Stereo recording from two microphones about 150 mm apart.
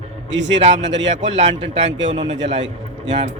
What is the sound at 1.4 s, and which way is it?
Speech, 45° right (ahead or behind).